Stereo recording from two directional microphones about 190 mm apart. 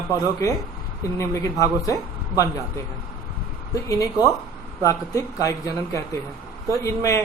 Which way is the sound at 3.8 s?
20° left (ahead or behind).